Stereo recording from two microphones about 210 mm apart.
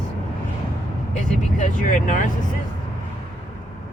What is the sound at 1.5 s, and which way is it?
Speech, 35° left (ahead or behind).